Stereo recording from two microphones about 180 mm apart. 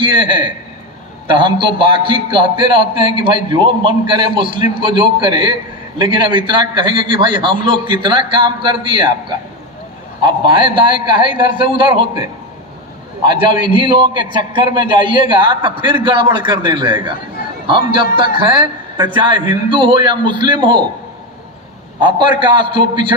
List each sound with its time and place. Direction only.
0.0 s a man's voice: 25° right (ahead or behind)
10.2 s a man's voice: 25° right (ahead or behind)
13.2 s a man's voice: 25° right (ahead or behind)
22.0 s a man's voice: 25° right (ahead or behind)